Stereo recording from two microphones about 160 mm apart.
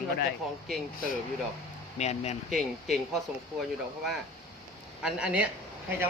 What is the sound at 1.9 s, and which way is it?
Speech, 45° left (ahead or behind).